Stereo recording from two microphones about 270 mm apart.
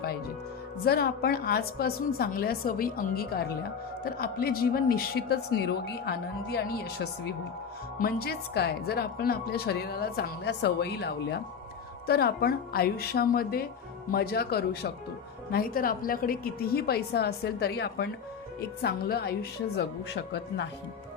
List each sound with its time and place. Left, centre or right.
0.9 s a woman's voice: left